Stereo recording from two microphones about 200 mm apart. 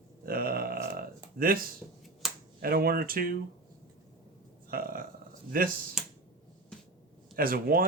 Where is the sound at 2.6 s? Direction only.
50° right (ahead or behind).